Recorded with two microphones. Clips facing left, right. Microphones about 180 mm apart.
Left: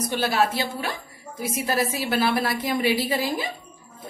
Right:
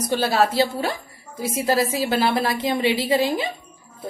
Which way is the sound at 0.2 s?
30° right (ahead or behind).